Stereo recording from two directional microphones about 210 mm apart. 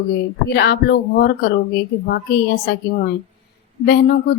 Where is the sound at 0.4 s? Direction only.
50° left (ahead or behind).